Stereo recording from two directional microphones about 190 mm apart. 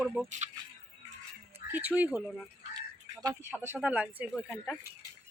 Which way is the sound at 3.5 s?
10° right (ahead or behind).